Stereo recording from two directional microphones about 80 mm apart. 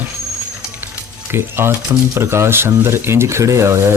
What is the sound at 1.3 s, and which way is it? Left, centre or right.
Speech, right.